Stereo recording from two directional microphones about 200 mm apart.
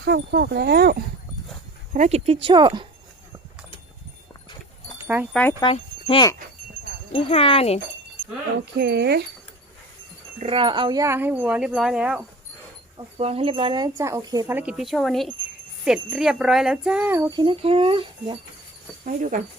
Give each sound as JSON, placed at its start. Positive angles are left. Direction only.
{"t": 0.0, "sound": "speech", "side_deg": -55}
{"t": 1.9, "sound": "speech", "side_deg": -35}
{"t": 4.9, "sound": "wind chime", "side_deg": -10}
{"t": 5.3, "sound": "wind chime", "side_deg": 10}
{"t": 5.5, "sound": "wind chime", "side_deg": 25}
{"t": 7.1, "sound": "speech", "side_deg": 30}
{"t": 8.7, "sound": "speech", "side_deg": -55}
{"t": 10.4, "sound": "speech", "side_deg": -25}
{"t": 13.0, "sound": "speech", "side_deg": -30}
{"t": 19.0, "sound": "speech", "side_deg": -40}